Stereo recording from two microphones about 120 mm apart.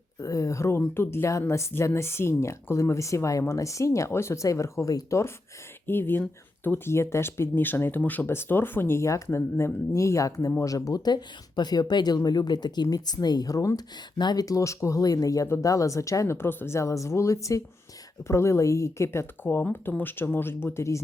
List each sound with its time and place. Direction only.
0.2 s speech: 25° left (ahead or behind)